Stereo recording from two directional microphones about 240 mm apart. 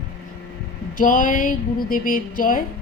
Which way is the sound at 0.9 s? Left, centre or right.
Left.